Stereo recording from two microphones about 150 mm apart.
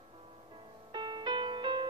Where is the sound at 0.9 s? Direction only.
30° right (ahead or behind).